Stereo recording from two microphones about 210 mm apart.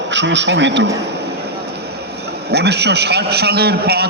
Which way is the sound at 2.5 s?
50° right (ahead or behind).